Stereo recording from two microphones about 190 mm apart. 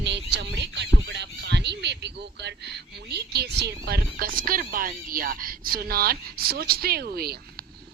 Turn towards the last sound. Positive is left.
turn(degrees=-55)  # may be behind; listen again after turning